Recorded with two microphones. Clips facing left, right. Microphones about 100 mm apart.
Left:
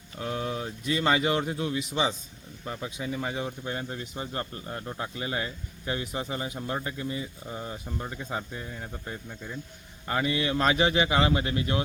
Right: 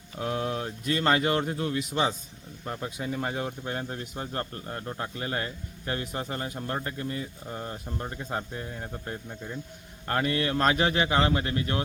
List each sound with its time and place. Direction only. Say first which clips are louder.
0.2 s a sound: right 2 dB; centre (ahead or behind)
0.9 s speech: even; 5° left (ahead or behind)
9.3 s speech: right 1 dB; 20° right (ahead or behind)
10.1 s speech: even; 5° left (ahead or behind)